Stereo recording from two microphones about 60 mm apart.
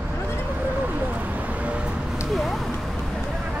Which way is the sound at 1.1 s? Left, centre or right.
Right.